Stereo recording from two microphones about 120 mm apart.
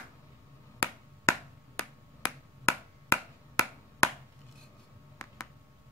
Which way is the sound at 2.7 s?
25° left (ahead or behind).